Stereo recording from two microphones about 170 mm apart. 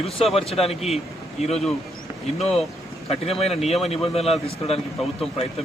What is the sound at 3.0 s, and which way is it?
Speech, 35° left (ahead or behind).